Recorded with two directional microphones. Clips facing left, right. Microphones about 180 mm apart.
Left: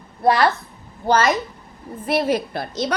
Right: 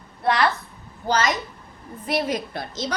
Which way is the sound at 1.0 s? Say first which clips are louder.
Left 5 dB; 55° left (ahead or behind).